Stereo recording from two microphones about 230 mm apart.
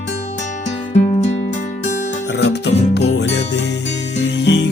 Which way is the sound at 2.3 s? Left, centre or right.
Left.